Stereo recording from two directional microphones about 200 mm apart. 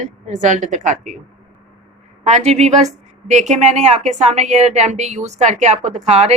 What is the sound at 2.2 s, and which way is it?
A woman's voice, 35° right (ahead or behind).